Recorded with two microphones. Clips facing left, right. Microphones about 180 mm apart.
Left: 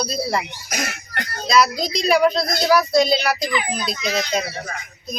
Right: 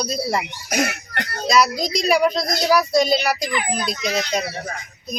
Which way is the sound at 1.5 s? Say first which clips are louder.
Even; 40° right (ahead or behind).